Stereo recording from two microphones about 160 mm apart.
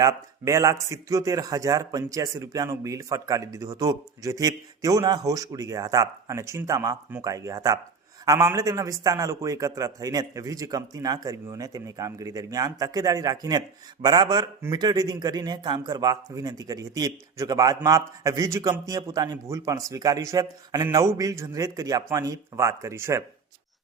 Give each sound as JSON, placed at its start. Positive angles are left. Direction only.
{"t": 0.0, "sound": "a man's voice", "side_deg": -20}